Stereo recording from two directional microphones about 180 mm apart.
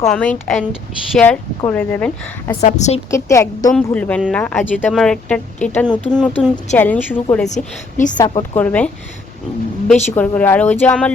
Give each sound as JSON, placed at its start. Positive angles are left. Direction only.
{"t": 0.1, "sound": "speech", "side_deg": 5}
{"t": 2.6, "sound": "a woman's voice", "side_deg": 40}
{"t": 3.1, "sound": "speech", "side_deg": 15}
{"t": 7.4, "sound": "a woman's voice", "side_deg": 40}
{"t": 8.2, "sound": "a woman's voice", "side_deg": 20}
{"t": 8.5, "sound": "speech", "side_deg": 10}
{"t": 10.2, "sound": "speech", "side_deg": 10}